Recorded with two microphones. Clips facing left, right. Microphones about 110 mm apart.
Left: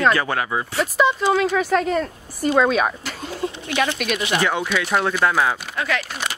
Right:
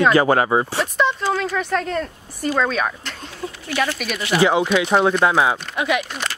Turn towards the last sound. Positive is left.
turn(degrees=10)  # may be behind; listen again after turning